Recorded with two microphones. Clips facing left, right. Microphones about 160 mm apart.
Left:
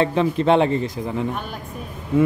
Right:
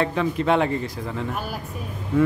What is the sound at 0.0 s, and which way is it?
Speech, 25° left (ahead or behind).